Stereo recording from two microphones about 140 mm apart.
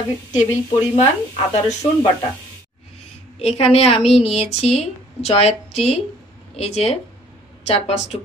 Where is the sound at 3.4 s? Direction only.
45° left (ahead or behind).